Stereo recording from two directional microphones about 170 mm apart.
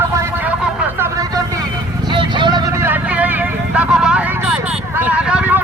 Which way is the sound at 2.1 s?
25° right (ahead or behind).